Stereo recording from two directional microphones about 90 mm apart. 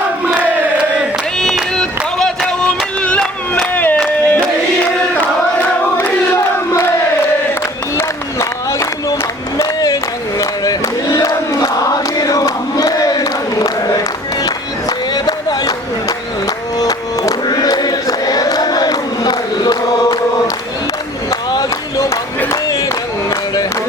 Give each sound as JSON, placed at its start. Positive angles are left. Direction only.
{"t": 1.4, "sound": "a sound", "side_deg": 5}
{"t": 6.0, "sound": "crowd", "side_deg": 25}
{"t": 7.9, "sound": "a sound", "side_deg": 35}
{"t": 9.6, "sound": "crowd", "side_deg": 40}
{"t": 14.4, "sound": "music", "side_deg": 50}
{"t": 21.5, "sound": "crowd", "side_deg": 40}